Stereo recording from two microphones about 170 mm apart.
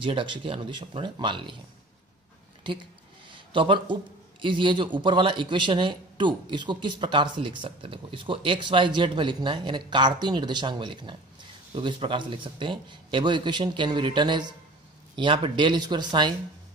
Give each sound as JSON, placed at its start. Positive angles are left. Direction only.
{"t": 0.0, "sound": "a man's voice", "side_deg": -30}
{"t": 2.6, "sound": "a man's voice", "side_deg": -30}